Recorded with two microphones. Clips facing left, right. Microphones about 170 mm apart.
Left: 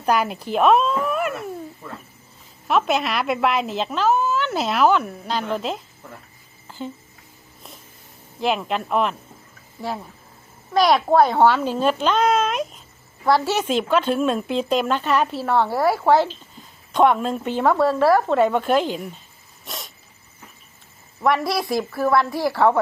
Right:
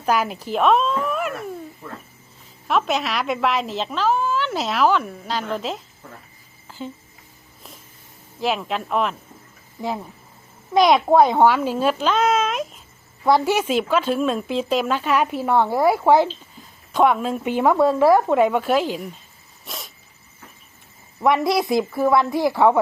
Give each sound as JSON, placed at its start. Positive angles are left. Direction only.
{"t": 0.0, "sound": "a woman's voice", "side_deg": 0}
{"t": 6.7, "sound": "a sound", "side_deg": 0}
{"t": 8.4, "sound": "a woman's voice", "side_deg": 0}
{"t": 9.8, "sound": "speech", "side_deg": -15}
{"t": 13.2, "sound": "speech", "side_deg": -15}
{"t": 16.9, "sound": "a woman's voice", "side_deg": 0}
{"t": 19.6, "sound": "dog", "side_deg": 0}
{"t": 21.2, "sound": "a woman's voice", "side_deg": -20}